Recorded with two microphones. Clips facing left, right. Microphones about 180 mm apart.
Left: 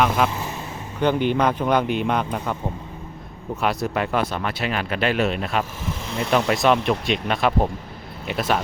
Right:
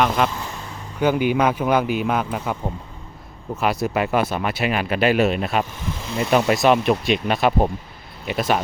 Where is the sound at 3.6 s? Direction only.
5° right (ahead or behind).